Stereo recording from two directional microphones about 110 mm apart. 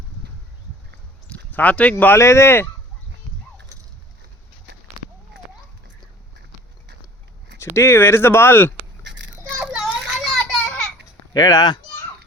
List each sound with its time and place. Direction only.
1.3 s speech: 15° left (ahead or behind)
7.6 s speech: 25° left (ahead or behind)
9.6 s children playing: 5° right (ahead or behind)
11.3 s speech: 35° left (ahead or behind)